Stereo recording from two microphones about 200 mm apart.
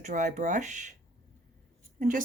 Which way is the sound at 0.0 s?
40° right (ahead or behind).